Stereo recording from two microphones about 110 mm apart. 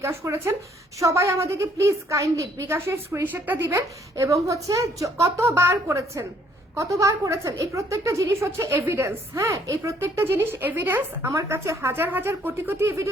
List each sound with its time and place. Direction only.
0.0 s a woman's voice: 25° right (ahead or behind)